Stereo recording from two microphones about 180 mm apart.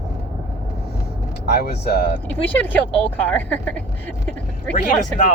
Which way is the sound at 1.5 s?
60° left (ahead or behind).